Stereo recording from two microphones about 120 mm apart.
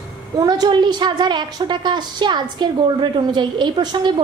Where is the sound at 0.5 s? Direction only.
35° right (ahead or behind).